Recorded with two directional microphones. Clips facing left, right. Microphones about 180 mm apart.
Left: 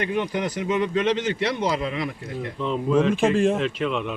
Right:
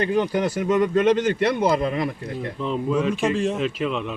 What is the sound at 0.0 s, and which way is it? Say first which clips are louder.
Speech: right 4 dB; 35° right (ahead or behind).